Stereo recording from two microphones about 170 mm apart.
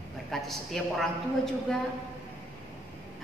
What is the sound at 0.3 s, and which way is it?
A man's voice, centre (ahead or behind).